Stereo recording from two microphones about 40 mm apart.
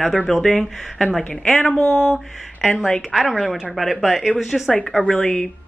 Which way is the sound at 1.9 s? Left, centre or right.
Centre.